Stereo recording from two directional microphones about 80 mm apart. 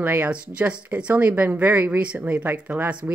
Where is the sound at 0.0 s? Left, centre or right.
Right.